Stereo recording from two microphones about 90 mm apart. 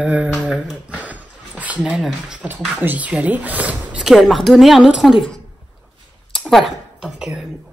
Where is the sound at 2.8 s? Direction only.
20° right (ahead or behind).